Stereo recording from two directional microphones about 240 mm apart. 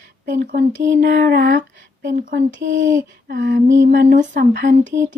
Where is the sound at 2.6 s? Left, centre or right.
Right.